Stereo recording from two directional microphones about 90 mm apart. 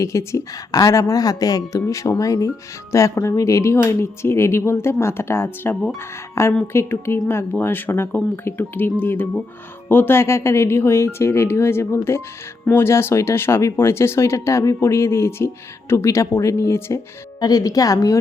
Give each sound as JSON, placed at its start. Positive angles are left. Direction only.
{"t": 0.0, "sound": "speech", "side_deg": 35}
{"t": 17.4, "sound": "a woman's voice", "side_deg": 45}